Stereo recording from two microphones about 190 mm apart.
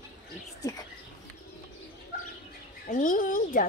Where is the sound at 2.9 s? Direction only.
45° left (ahead or behind).